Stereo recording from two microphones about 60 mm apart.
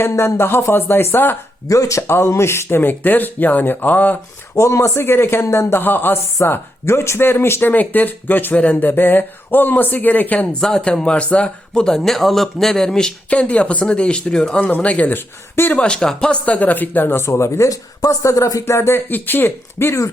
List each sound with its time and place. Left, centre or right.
0.0 s speech: left
1.6 s speech: left
4.5 s speech: left
5.8 s speech: left
6.4 s speech: left
7.7 s speech: left
10.6 s speech: centre
13.3 s speech: left
16.5 s speech: left
17.7 s speech: left
18.6 s speech: left
19.0 s speech: left